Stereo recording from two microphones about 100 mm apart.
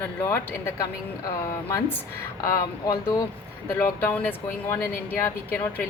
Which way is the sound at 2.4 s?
35° left (ahead or behind).